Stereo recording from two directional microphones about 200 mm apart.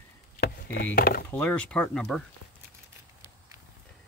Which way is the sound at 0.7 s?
70° left (ahead or behind).